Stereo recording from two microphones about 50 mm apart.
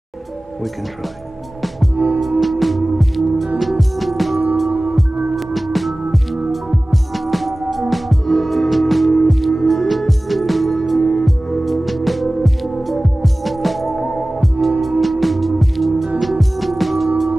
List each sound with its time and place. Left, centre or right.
2.0 s music: right
2.4 s music: centre